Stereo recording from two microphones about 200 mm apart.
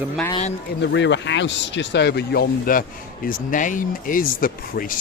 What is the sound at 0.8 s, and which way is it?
Speech, 60° left (ahead or behind).